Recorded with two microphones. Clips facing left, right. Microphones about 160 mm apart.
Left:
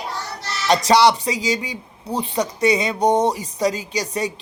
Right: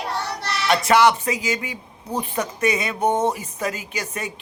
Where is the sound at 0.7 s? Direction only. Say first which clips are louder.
Left 1 dB; 35° left (ahead or behind).